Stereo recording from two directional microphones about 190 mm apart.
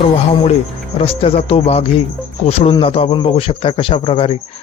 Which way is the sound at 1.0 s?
30° left (ahead or behind).